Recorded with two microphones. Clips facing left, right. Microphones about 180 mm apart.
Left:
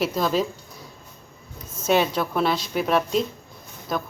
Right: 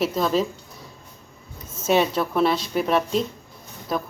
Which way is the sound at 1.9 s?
Centre (ahead or behind).